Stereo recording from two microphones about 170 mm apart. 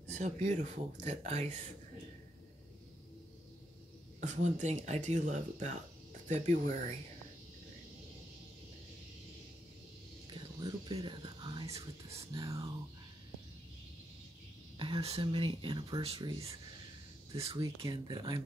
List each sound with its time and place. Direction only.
0.0 s speech: 40° right (ahead or behind)
4.2 s speech: 45° right (ahead or behind)
10.3 s whispering: 25° right (ahead or behind)
12.4 s speech: 20° right (ahead or behind)
14.8 s speech: 35° right (ahead or behind)
17.6 s speech: 25° right (ahead or behind)